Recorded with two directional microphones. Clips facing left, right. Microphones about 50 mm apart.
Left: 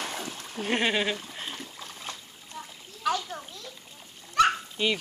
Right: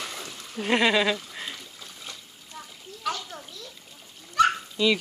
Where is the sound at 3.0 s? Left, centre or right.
Centre.